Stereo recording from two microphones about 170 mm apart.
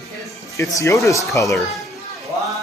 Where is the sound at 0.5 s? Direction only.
15° left (ahead or behind).